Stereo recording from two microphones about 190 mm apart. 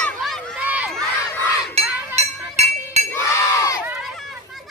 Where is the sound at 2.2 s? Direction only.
35° right (ahead or behind).